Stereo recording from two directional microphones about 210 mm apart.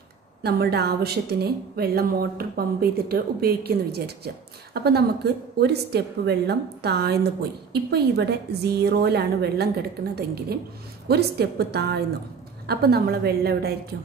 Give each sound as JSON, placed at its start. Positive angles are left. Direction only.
{"t": 0.4, "sound": "a woman's voice", "side_deg": -50}